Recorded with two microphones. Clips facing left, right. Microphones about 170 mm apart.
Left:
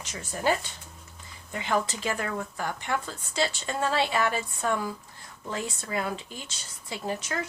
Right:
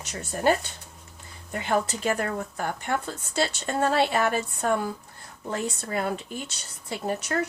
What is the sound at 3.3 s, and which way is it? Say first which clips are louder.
Speech: right 2 dB; 60° right (ahead or behind).